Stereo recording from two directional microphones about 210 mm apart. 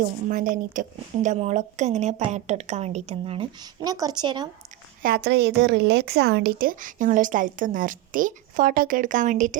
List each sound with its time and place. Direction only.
0.3 s a woman's voice: 40° right (ahead or behind); by 4.4 s 20° right (ahead or behind)
5.0 s a woman's voice: 50° right (ahead or behind)